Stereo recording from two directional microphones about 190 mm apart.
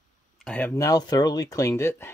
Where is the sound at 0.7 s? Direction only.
15° left (ahead or behind).